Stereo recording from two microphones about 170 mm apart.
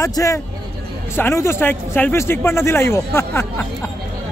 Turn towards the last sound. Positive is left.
turn(degrees=15)  # may be behind; listen again after turning